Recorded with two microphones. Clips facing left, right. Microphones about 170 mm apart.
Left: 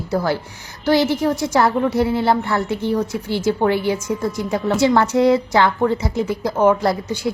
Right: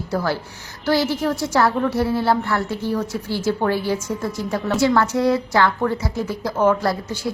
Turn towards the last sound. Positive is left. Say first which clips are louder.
# left 3 dB
turn(degrees=20)  # may be behind; listen again after turning